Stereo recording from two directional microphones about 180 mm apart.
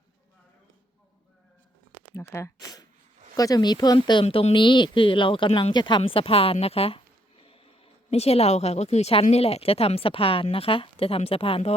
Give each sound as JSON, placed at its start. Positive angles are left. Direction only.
{"t": 2.1, "sound": "a woman's voice", "side_deg": 15}